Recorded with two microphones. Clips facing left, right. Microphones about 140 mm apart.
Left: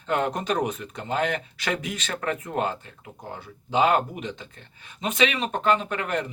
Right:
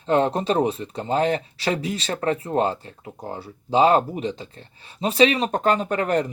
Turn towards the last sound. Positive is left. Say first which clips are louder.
# right 6 dB
turn(degrees=-40)  # may be behind; listen again after turning